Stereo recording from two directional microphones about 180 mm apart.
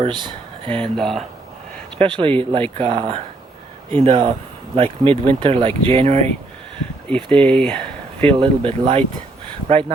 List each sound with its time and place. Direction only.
0.0 s speech: 25° right (ahead or behind)
0.9 s speech: centre (ahead or behind)
2.0 s speech: 30° right (ahead or behind)
7.3 s speech: 5° left (ahead or behind)
8.4 s speech: 30° right (ahead or behind)